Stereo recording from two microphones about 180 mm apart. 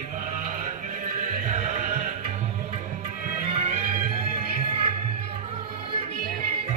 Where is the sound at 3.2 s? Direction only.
45° right (ahead or behind).